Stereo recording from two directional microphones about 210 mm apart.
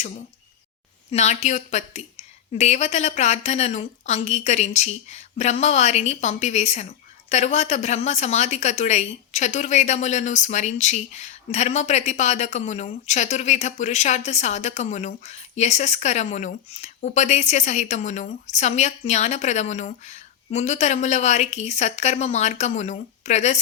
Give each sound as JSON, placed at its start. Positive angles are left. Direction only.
{"t": 1.1, "sound": "a woman's voice", "side_deg": 35}